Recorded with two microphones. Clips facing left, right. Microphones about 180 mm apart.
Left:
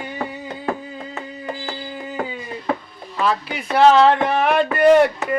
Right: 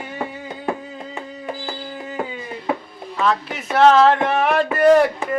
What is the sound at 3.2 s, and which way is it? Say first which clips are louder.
Speech: even; 5° left (ahead or behind).